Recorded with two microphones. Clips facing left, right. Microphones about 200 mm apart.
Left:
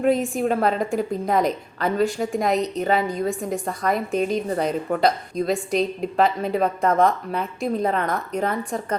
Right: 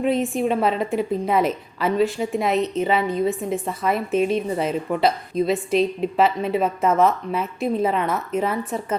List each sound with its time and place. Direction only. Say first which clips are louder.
0.0 s a woman's voice: even; centre (ahead or behind)